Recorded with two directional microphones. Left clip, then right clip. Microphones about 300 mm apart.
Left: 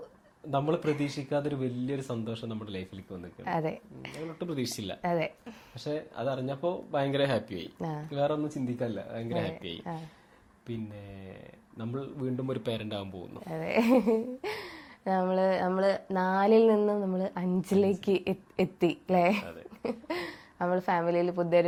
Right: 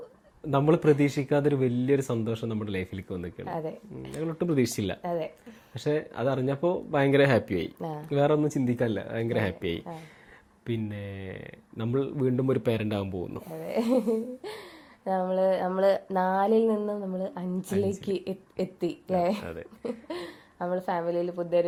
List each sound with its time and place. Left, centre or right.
0.5 s speech: right
3.4 s a woman's voice: centre
4.4 s speech: right
5.0 s a woman's voice: centre
5.8 s speech: right
7.8 s a woman's voice: centre
8.1 s speech: right
13.5 s a woman's voice: centre